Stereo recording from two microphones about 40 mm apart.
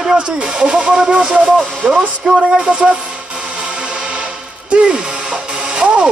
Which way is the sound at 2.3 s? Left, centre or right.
Centre.